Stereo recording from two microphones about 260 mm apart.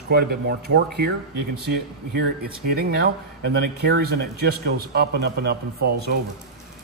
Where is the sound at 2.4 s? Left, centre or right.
Right.